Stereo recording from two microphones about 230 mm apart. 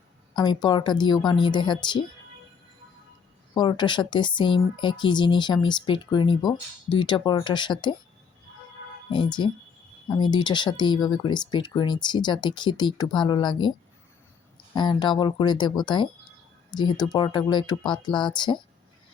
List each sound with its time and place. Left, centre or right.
0.3 s speech: centre
3.5 s speech: left
9.0 s speech: centre
14.8 s speech: centre